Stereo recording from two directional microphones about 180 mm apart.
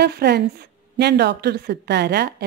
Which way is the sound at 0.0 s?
65° right (ahead or behind).